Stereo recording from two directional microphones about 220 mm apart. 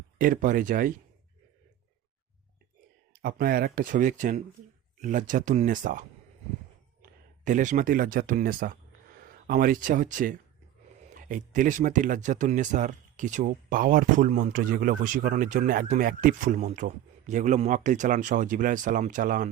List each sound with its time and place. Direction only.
0.2 s speech: 40° right (ahead or behind)
3.1 s speech: 40° right (ahead or behind)